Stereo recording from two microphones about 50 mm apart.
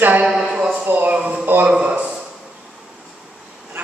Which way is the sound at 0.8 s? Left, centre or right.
Right.